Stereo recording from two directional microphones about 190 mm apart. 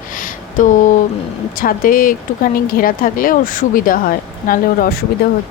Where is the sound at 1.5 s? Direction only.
45° left (ahead or behind).